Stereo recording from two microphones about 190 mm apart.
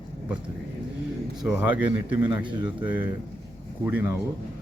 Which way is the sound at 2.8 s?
5° right (ahead or behind).